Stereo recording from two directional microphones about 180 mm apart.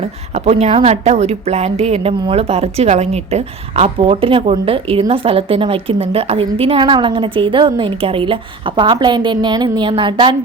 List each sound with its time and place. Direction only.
0.3 s a woman's voice: 35° right (ahead or behind)